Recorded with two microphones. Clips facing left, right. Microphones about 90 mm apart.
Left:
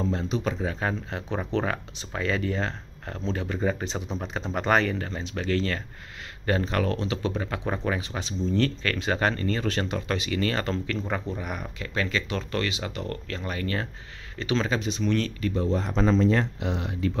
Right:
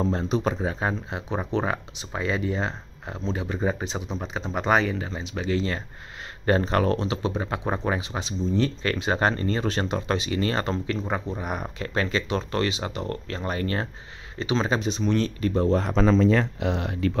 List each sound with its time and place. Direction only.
0.0 s speech: 35° right (ahead or behind); by 4.0 s 15° right (ahead or behind)
4.0 s speech: 5° right (ahead or behind)
6.4 s speech: 35° right (ahead or behind); by 11.4 s 20° right (ahead or behind)
11.4 s speech: 35° right (ahead or behind)
14.4 s speech: 20° right (ahead or behind)
15.5 s speech: 55° right (ahead or behind)